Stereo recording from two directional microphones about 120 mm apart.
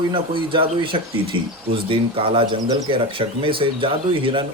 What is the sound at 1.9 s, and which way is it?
Speech, 50° right (ahead or behind).